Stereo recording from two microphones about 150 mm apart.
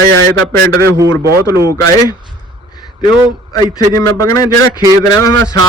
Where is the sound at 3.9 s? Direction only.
20° left (ahead or behind).